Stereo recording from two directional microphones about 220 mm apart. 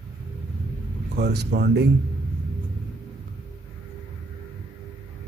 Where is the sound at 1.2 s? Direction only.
50° right (ahead or behind).